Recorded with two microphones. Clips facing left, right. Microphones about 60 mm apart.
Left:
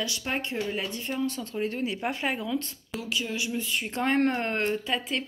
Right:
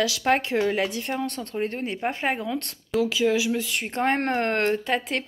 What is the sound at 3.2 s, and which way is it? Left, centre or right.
Speech, right.